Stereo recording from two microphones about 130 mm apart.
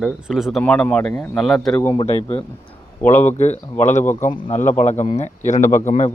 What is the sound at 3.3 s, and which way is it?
Speech, 60° left (ahead or behind).